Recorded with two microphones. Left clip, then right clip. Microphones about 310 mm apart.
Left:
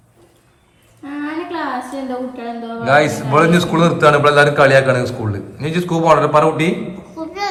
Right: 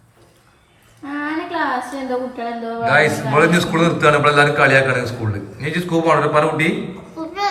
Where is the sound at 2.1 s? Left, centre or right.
Right.